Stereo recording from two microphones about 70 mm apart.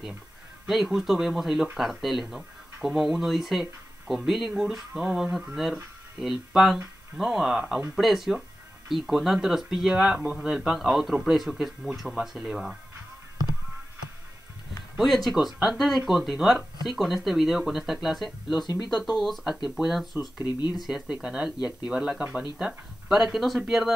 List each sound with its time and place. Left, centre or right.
0.7 s speech: centre
15.0 s speech: centre
18.7 s speech: left
18.9 s speech: centre
20.4 s speech: left
20.8 s speech: centre